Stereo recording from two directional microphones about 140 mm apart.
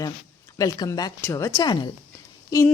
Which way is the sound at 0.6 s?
25° left (ahead or behind).